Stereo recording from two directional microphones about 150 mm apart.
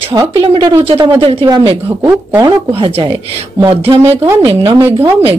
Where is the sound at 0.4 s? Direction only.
35° right (ahead or behind).